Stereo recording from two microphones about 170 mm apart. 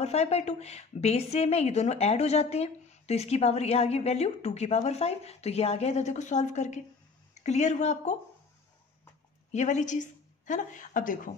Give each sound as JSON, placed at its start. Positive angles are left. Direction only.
{"t": 0.0, "sound": "a woman's voice", "side_deg": 40}
{"t": 9.5, "sound": "a woman's voice", "side_deg": 45}